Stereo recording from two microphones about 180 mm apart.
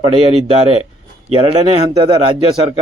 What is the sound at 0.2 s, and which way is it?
A man's voice, 35° right (ahead or behind).